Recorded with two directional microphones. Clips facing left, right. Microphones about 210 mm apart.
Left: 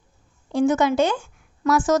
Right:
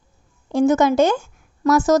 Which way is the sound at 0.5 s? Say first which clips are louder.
Right 3 dB; 45° right (ahead or behind).